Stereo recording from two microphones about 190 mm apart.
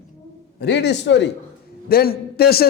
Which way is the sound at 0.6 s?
65° left (ahead or behind).